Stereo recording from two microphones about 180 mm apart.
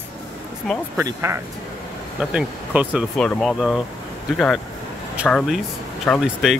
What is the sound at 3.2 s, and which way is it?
Speech, 5° left (ahead or behind).